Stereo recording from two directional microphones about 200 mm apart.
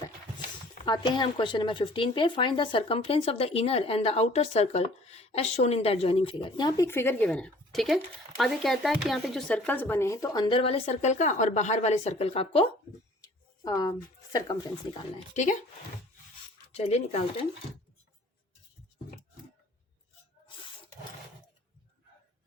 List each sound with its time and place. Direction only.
0.9 s speech: 25° left (ahead or behind)
13.7 s speech: 15° left (ahead or behind)
16.7 s speech: 30° left (ahead or behind)